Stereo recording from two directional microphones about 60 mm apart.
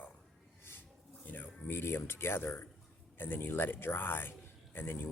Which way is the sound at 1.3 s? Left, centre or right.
Left.